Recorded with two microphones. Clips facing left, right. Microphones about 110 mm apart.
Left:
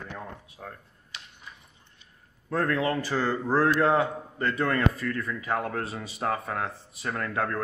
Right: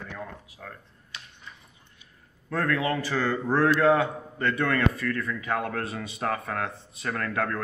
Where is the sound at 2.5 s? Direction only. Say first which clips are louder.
Even; 25° left (ahead or behind).